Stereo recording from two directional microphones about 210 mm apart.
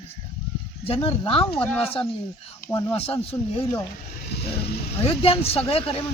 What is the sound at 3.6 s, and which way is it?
Speech, 15° left (ahead or behind).